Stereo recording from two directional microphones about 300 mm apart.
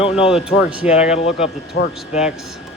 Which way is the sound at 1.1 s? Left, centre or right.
Centre.